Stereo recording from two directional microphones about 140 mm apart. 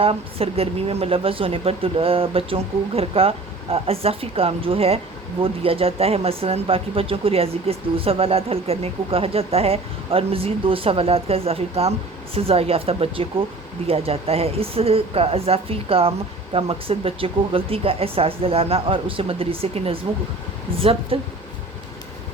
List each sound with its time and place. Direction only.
0.0 s speech: 45° right (ahead or behind)
21.1 s speech: 40° right (ahead or behind)